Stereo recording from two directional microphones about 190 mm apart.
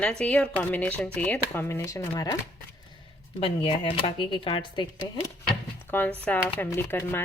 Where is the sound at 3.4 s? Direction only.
30° left (ahead or behind).